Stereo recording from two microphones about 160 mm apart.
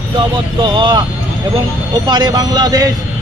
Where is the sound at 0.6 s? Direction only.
30° right (ahead or behind).